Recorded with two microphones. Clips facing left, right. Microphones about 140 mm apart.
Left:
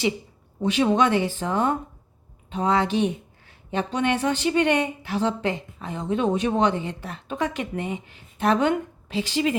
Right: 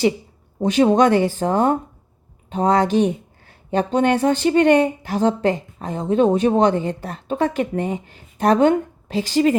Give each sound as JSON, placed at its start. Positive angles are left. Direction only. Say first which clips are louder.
{"t": 0.6, "sound": "speech", "louder": "right 6 dB", "side_deg": -40}